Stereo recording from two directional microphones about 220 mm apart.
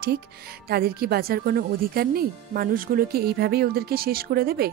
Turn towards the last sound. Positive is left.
turn(degrees=-45)  # may be behind; listen again after turning